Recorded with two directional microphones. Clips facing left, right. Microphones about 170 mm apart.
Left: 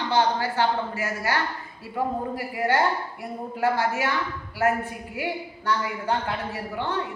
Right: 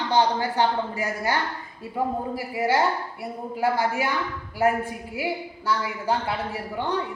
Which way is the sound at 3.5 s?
10° right (ahead or behind).